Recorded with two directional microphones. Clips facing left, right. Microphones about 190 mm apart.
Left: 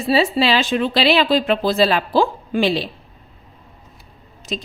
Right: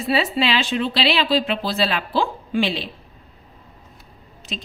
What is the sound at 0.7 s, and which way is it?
A woman's voice, 50° left (ahead or behind).